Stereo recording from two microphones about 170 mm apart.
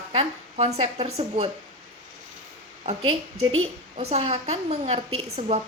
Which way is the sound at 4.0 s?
40° right (ahead or behind).